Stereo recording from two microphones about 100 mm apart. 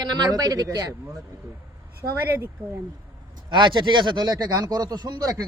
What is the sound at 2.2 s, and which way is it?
Speech, 20° right (ahead or behind).